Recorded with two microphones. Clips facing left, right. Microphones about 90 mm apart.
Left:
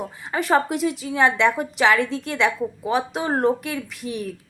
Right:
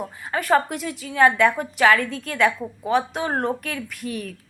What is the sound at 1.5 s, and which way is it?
Speech, 10° left (ahead or behind).